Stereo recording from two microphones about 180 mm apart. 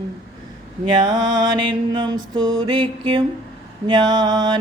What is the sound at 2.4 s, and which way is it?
Mantra, 90° right.